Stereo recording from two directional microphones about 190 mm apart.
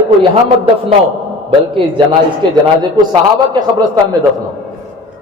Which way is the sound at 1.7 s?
25° right (ahead or behind).